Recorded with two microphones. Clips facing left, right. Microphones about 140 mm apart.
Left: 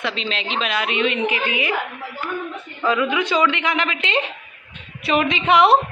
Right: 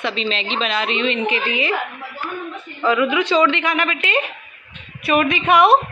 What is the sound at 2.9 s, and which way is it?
Speech, 15° right (ahead or behind).